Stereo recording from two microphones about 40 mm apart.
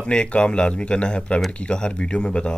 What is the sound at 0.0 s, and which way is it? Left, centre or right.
Speech, left.